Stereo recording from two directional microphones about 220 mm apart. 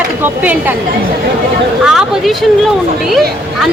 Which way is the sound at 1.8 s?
Centre (ahead or behind).